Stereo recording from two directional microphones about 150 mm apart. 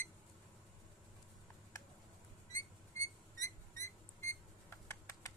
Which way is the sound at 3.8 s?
20° left (ahead or behind).